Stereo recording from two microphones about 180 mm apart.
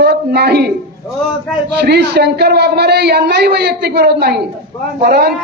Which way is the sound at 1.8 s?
65° right (ahead or behind).